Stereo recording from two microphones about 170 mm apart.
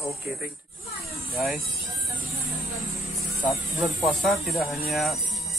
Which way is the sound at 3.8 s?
Centre (ahead or behind).